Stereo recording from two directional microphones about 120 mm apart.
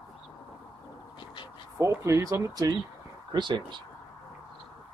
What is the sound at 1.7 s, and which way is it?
Speech, 25° right (ahead or behind).